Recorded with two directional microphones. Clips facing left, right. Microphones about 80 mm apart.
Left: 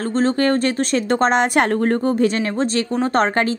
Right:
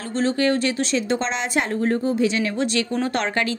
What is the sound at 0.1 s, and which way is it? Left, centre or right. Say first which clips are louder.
Speech: left 2 dB; left.